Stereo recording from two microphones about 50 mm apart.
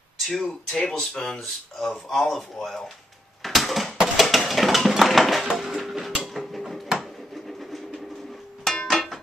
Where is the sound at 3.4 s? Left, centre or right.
Centre.